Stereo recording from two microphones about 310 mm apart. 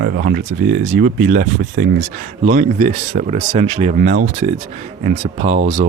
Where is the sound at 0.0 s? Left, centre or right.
Right.